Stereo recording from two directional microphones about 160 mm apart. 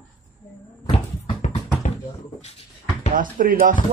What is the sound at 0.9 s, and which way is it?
Bouncing, 35° left (ahead or behind).